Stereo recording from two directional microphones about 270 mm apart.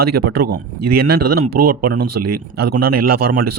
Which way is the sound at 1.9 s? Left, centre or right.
Right.